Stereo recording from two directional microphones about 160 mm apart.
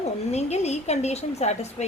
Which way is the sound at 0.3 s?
45° left (ahead or behind).